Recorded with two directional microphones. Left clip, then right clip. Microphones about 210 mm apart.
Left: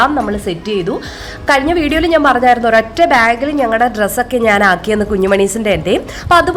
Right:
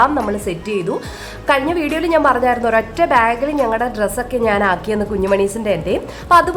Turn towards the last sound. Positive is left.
turn(degrees=15)  # may be behind; listen again after turning